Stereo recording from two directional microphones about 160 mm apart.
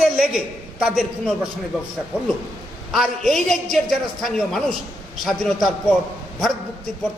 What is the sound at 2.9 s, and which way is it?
A woman's voice, centre (ahead or behind).